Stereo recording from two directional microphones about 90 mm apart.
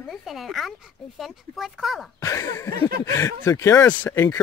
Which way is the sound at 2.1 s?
35° left (ahead or behind).